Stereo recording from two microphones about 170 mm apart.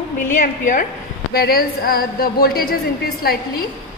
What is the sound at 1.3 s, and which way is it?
A woman's voice, 65° left (ahead or behind).